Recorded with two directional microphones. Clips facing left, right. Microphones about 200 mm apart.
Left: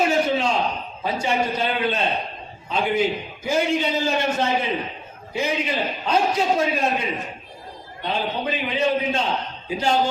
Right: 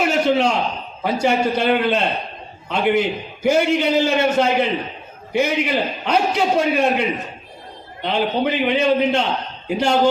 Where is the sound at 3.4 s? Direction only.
75° right (ahead or behind).